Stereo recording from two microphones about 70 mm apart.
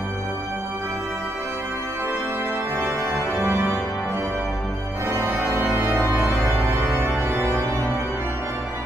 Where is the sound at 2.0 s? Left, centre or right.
Right.